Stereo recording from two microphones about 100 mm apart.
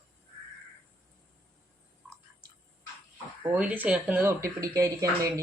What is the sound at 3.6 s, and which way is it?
Speech, 15° right (ahead or behind).